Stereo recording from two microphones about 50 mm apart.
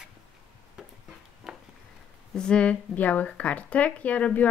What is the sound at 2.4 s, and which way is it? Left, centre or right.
Speech, left.